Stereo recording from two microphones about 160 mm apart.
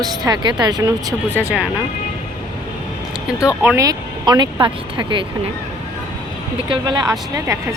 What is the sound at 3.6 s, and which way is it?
Speech, 20° right (ahead or behind).